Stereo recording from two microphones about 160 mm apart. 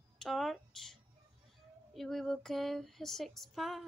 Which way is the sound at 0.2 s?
Centre (ahead or behind).